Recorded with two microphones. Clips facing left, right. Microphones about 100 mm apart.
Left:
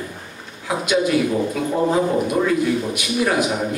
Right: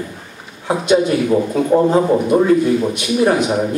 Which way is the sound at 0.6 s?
30° right (ahead or behind).